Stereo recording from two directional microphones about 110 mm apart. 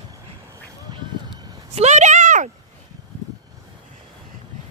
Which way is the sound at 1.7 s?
90° right.